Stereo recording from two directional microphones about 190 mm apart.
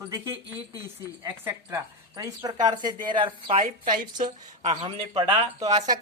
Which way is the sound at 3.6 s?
45° right (ahead or behind).